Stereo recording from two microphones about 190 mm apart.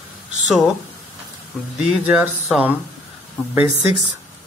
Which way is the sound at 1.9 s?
5° right (ahead or behind).